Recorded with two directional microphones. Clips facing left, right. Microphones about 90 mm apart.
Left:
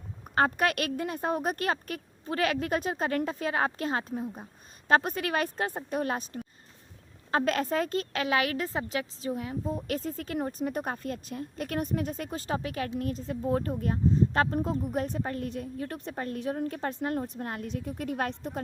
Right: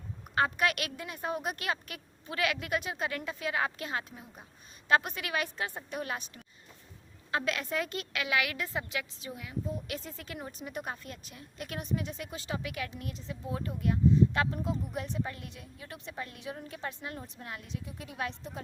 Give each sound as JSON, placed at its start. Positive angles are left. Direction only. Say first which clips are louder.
{"t": 0.3, "sound": "a woman's voice", "louder": "left 3 dB", "side_deg": 40}